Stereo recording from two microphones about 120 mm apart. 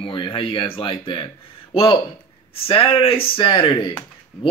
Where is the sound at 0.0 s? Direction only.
45° left (ahead or behind).